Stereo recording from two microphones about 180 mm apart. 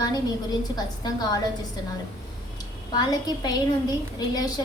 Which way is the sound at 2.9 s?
20° left (ahead or behind).